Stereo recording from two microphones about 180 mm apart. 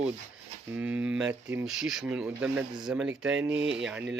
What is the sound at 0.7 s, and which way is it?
Speech, 10° right (ahead or behind).